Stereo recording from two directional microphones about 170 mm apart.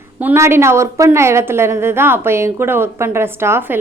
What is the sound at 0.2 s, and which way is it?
A woman's voice, 15° right (ahead or behind).